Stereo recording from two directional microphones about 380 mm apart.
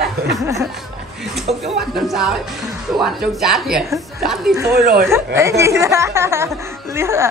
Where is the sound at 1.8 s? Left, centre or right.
Centre.